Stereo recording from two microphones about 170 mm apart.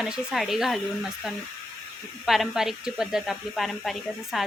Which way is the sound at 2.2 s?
Centre (ahead or behind).